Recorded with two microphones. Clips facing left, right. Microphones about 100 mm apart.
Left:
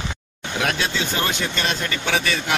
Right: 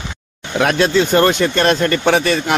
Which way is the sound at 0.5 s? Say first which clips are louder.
Right 10 dB; 55° right (ahead or behind).